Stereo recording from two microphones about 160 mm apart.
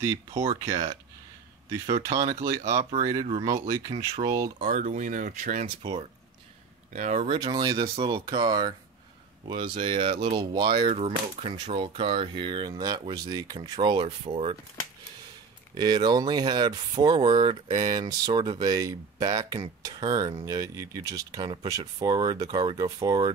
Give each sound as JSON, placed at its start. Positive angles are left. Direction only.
{"t": 0.5, "sound": "speech", "side_deg": -25}
{"t": 2.0, "sound": "speech", "side_deg": -20}
{"t": 2.6, "sound": "speech", "side_deg": -40}
{"t": 3.0, "sound": "speech", "side_deg": -20}
{"t": 3.3, "sound": "speech", "side_deg": -35}
{"t": 4.7, "sound": "speech", "side_deg": -55}
{"t": 6.9, "sound": "speech", "side_deg": -55}
{"t": 7.2, "sound": "speech", "side_deg": -25}
{"t": 10.9, "sound": "speech", "side_deg": -40}
{"t": 15.7, "sound": "speech", "side_deg": -25}